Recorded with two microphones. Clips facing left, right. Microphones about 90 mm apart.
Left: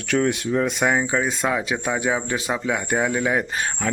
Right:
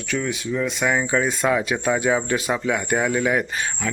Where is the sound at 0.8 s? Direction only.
25° left (ahead or behind).